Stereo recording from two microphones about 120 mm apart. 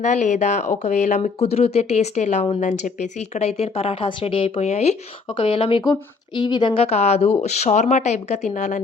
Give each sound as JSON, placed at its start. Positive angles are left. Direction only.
{"t": 0.0, "sound": "speech", "side_deg": 80}
{"t": 2.6, "sound": "speech", "side_deg": 85}
{"t": 5.3, "sound": "speech", "side_deg": 50}
{"t": 5.8, "sound": "speech", "side_deg": 35}